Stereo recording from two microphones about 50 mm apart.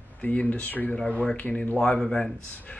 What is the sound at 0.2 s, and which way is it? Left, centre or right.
Speech, left.